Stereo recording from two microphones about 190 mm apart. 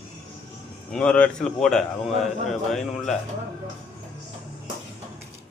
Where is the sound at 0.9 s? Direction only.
5° left (ahead or behind).